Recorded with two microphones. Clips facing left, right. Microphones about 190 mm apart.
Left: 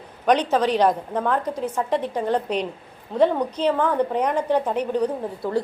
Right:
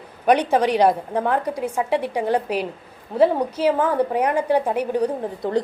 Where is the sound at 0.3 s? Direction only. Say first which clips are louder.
Right 2 dB; 10° right (ahead or behind).